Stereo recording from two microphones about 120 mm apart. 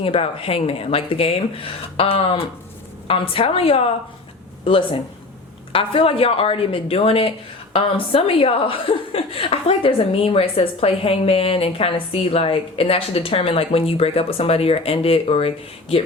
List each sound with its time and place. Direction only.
0.0 s speech: 50° left (ahead or behind)